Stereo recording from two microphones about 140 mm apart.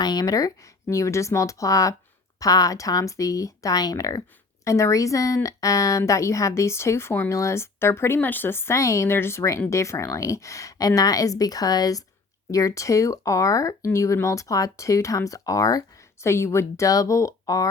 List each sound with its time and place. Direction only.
0.0 s a woman's voice: 30° left (ahead or behind)